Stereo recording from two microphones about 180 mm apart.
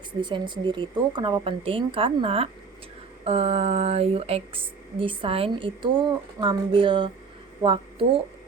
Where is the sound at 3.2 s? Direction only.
35° right (ahead or behind).